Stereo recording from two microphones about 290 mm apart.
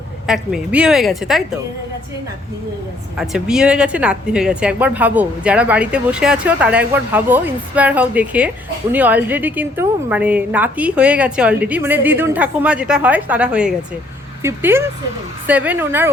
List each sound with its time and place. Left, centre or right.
0.3 s a woman's voice: centre
3.2 s a woman's voice: centre